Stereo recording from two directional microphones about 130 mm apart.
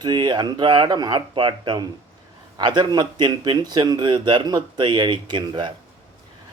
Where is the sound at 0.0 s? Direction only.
35° right (ahead or behind).